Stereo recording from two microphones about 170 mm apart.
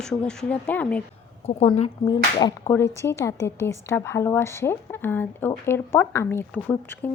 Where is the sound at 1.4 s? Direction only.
35° left (ahead or behind).